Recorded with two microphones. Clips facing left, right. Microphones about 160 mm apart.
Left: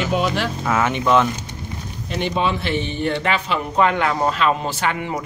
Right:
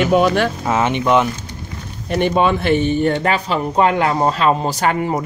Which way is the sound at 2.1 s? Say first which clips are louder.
Right 6 dB; 50° right (ahead or behind).